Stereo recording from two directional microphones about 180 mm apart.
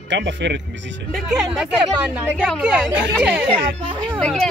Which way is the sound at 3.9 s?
25° right (ahead or behind).